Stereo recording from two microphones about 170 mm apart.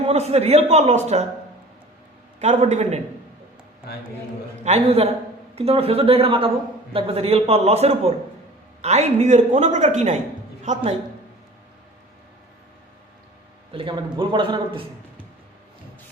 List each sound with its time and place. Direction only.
0.1 s a man's voice: 40° right (ahead or behind)
2.4 s a man's voice: 40° right (ahead or behind)
4.6 s a man's voice: 40° right (ahead or behind)
13.7 s a man's voice: 30° right (ahead or behind)